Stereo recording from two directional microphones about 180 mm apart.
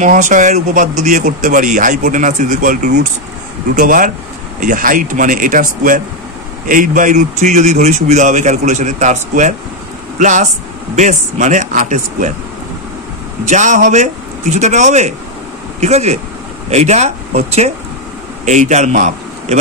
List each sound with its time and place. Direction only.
0.0 s speech: 45° right (ahead or behind)
13.5 s a man's voice: 45° right (ahead or behind)